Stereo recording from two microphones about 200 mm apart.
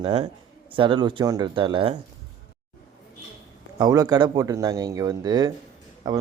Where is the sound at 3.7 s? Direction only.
20° right (ahead or behind).